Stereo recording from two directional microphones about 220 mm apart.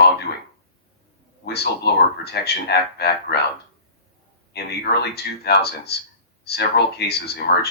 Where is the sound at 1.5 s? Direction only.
50° left (ahead or behind).